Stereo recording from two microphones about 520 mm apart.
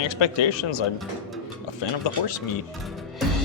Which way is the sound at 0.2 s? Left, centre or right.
Left.